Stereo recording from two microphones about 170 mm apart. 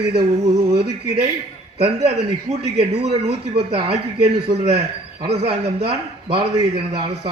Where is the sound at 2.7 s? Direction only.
35° right (ahead or behind).